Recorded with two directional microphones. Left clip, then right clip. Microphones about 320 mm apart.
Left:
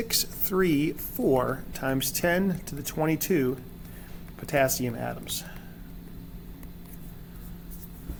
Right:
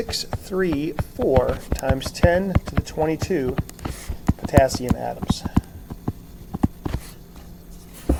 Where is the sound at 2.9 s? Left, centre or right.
Left.